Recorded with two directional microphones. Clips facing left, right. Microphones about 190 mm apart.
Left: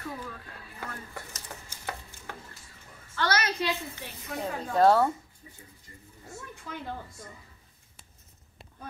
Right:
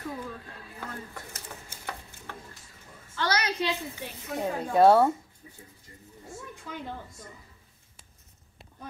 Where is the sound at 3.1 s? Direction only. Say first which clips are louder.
Even; 15° right (ahead or behind).